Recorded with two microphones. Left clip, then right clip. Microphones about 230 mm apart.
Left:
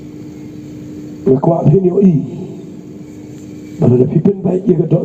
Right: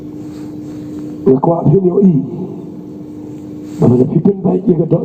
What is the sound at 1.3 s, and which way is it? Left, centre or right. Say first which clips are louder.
Speech: even; left.